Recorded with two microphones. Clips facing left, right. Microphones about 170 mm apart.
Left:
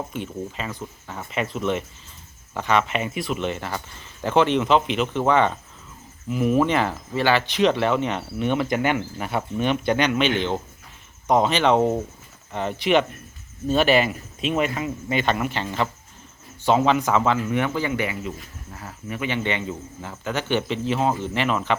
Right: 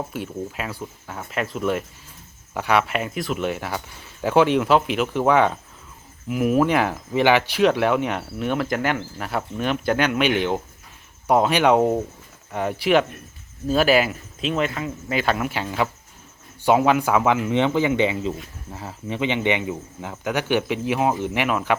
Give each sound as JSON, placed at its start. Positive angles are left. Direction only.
{"t": 0.1, "sound": "speech", "side_deg": -5}